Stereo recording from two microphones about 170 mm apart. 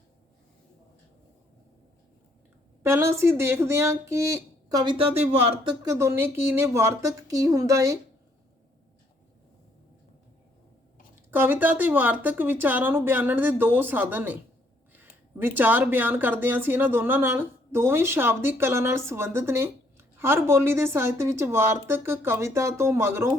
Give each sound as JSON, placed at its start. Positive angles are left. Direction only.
{"t": 2.8, "sound": "speech", "side_deg": -15}
{"t": 5.8, "sound": "speech", "side_deg": -20}
{"t": 11.3, "sound": "speech", "side_deg": -10}